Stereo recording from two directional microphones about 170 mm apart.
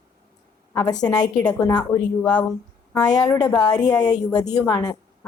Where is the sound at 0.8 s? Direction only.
20° left (ahead or behind).